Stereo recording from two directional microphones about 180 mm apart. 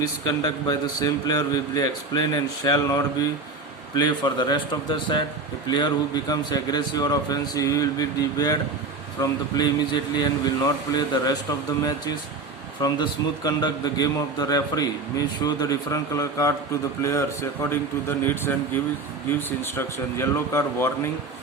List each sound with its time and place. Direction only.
0.0 s a man's voice: 20° left (ahead or behind)
12.8 s a man's voice: 20° left (ahead or behind)